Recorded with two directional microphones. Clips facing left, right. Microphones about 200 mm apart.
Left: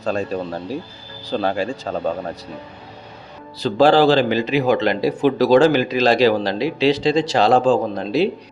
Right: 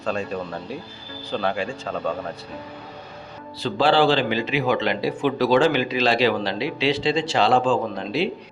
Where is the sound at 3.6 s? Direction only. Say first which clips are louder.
Left 5 dB; 45° left (ahead or behind).